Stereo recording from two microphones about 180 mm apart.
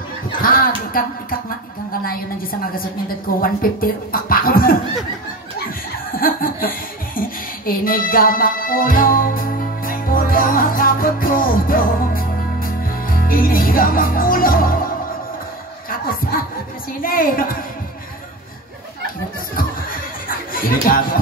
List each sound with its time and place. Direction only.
0.4 s speech: 55° left (ahead or behind)
3.3 s speech: 50° left (ahead or behind)
6.1 s a sound: 55° left (ahead or behind)
15.9 s chuckle: 55° left (ahead or behind)
17.0 s speech: 50° left (ahead or behind)
19.5 s music: 50° left (ahead or behind)